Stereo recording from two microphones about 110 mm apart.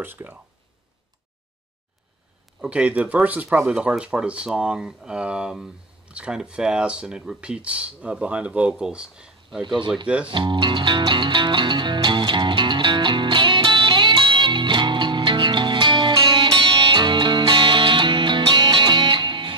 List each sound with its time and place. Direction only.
0.0 s speech: 15° right (ahead or behind)
2.6 s speech: 10° right (ahead or behind)
9.6 s speech: 45° right (ahead or behind)
10.0 s speech: 10° right (ahead or behind)
10.3 s music: 45° right (ahead or behind)